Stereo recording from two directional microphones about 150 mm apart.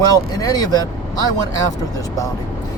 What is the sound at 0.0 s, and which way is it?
Speech, 25° left (ahead or behind).